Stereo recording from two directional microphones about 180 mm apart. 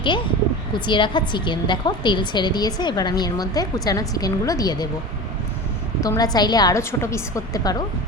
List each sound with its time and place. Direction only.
0.7 s a woman's voice: 25° left (ahead or behind)
6.0 s a woman's voice: 20° left (ahead or behind)